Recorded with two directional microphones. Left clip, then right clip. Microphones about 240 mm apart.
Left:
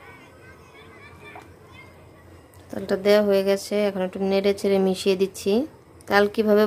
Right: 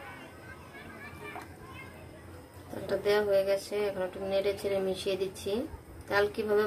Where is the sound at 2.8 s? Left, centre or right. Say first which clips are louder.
Left 9 dB; left.